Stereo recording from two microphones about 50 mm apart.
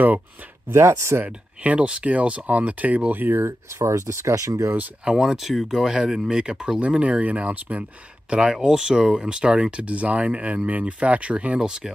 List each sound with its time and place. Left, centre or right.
0.7 s speech: right
1.2 s speech: right
5.0 s speech: centre
8.3 s speech: centre